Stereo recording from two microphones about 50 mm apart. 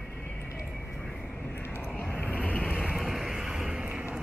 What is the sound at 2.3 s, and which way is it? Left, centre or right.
Vehicle, left.